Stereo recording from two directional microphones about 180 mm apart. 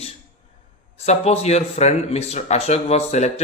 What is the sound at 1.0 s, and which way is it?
Speech, 35° left (ahead or behind).